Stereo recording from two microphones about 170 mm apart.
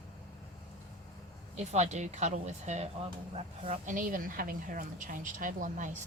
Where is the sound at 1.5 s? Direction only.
40° right (ahead or behind).